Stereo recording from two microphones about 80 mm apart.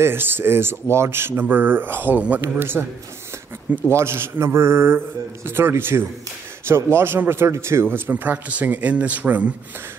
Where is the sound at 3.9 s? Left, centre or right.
Right.